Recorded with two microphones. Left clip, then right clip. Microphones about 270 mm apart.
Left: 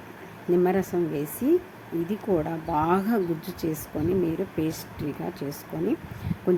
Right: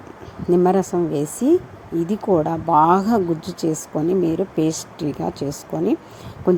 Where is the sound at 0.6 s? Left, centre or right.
Centre.